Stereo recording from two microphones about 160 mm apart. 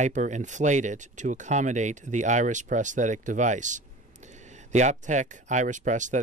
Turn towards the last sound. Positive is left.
turn(degrees=-50)  # may be behind; listen again after turning